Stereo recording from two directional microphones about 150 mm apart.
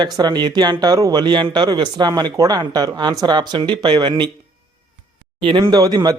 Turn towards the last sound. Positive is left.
turn(degrees=-25)  # may be behind; listen again after turning